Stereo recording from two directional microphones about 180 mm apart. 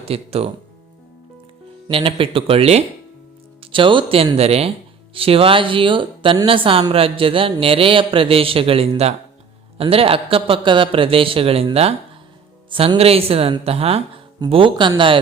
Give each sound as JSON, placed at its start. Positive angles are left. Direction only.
{"t": 0.0, "sound": "a man's voice", "side_deg": -35}
{"t": 1.9, "sound": "a man's voice", "side_deg": -30}